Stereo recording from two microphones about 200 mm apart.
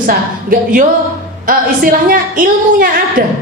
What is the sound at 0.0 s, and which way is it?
A woman's voice, 45° right (ahead or behind).